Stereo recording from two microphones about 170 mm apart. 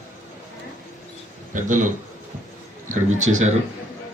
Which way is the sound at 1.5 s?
45° right (ahead or behind).